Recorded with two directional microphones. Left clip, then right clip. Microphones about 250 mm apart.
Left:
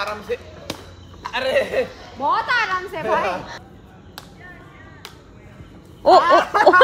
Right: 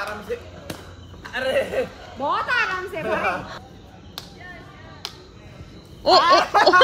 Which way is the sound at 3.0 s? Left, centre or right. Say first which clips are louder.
Left 3 dB; left.